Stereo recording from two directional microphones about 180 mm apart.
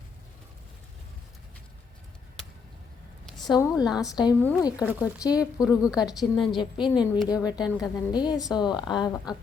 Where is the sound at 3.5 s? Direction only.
20° left (ahead or behind).